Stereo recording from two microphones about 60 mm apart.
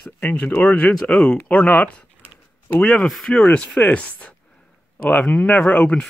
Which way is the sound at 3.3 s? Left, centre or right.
Left.